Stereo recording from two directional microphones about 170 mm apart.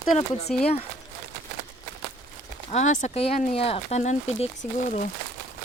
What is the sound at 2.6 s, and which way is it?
Speech, 45° left (ahead or behind).